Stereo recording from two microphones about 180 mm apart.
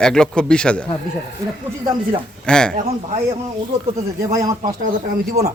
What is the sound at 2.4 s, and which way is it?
Speech, 5° left (ahead or behind).